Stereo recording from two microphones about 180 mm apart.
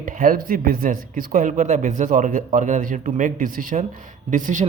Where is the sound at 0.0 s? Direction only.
50° right (ahead or behind).